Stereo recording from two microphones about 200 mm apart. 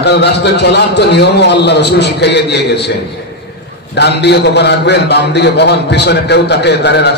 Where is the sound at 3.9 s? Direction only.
60° left (ahead or behind).